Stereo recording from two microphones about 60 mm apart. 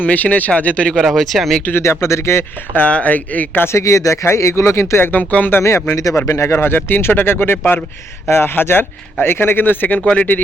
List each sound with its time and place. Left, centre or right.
0.0 s speech: left
0.9 s speech: centre
1.7 s speech: left
2.7 s speech: left
3.7 s speech: left
5.1 s speech: left
5.9 s speech: left